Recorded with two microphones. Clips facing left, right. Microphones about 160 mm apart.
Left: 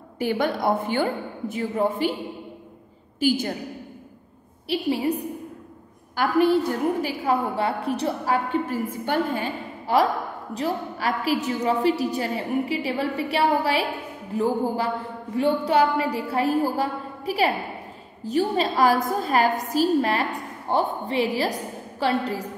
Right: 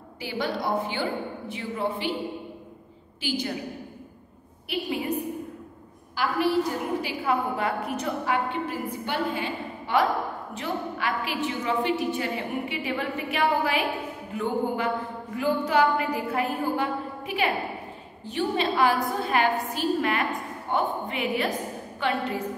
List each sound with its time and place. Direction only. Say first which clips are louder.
0.2 s a woman's voice: left 6 dB; 50° left (ahead or behind)
3.2 s a woman's voice: left 7 dB; 45° left (ahead or behind)
4.6 s a woman's voice: left 5 dB; 35° left (ahead or behind)
6.1 s a woman's voice: left 5 dB; 50° left (ahead or behind)
7.5 s a woman's voice: left 3 dB; 30° left (ahead or behind)